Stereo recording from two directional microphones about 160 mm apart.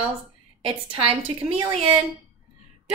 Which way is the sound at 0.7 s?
35° right (ahead or behind).